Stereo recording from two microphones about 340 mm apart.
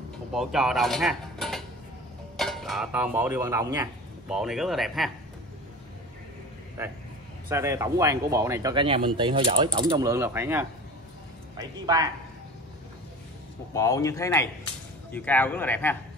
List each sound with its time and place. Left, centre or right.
0.3 s mechanisms: centre
2.3 s speech: centre
7.4 s speech: centre
13.7 s a man's voice: centre